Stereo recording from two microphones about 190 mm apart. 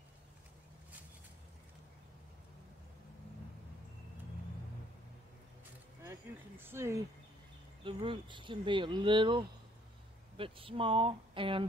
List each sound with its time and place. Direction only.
6.0 s speech: 10° right (ahead or behind)
7.8 s speech: 25° right (ahead or behind)